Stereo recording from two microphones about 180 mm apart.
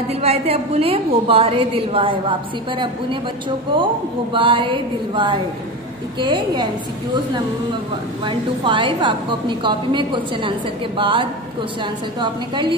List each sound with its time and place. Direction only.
0.1 s a woman's voice: 35° right (ahead or behind)
4.3 s a woman's voice: 30° right (ahead or behind)
8.3 s a woman's voice: 25° right (ahead or behind)